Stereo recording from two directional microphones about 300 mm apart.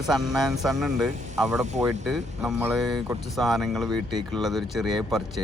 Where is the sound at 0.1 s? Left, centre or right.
Centre.